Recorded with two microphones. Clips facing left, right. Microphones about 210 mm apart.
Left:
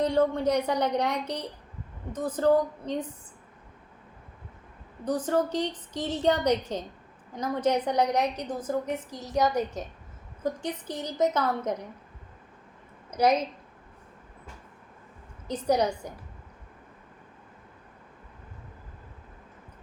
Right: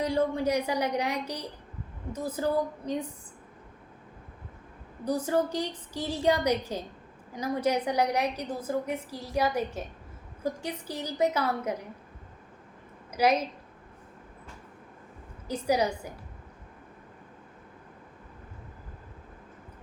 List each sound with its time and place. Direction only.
0.0 s a woman's voice: 10° right (ahead or behind)
5.0 s a woman's voice: 10° right (ahead or behind)
13.1 s a sound: 5° right (ahead or behind)
15.4 s a woman's voice: 10° right (ahead or behind)